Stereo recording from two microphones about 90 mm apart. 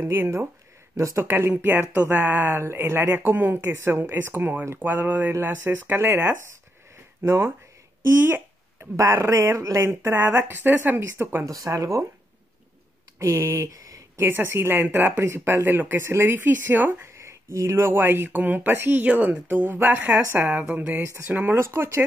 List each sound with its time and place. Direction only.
0.1 s speech: 25° right (ahead or behind)
1.5 s speech: 25° right (ahead or behind)
7.2 s speech: 35° right (ahead or behind)
8.0 s speech: 25° right (ahead or behind)
9.6 s speech: 40° right (ahead or behind)
9.8 s speech: 25° right (ahead or behind)
11.4 s speech: 40° right (ahead or behind)
13.2 s speech: 35° right (ahead or behind)
14.1 s speech: 25° right (ahead or behind)
20.2 s speech: 30° right (ahead or behind)
20.4 s speech: 15° right (ahead or behind)